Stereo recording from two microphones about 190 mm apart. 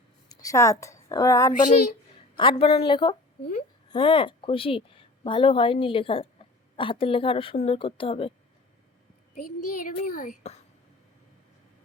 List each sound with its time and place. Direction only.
0.3 s a woman's voice: 20° left (ahead or behind)
9.3 s a child's voice: 45° left (ahead or behind)